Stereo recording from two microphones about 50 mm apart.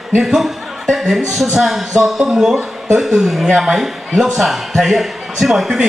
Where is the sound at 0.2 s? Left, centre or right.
Centre.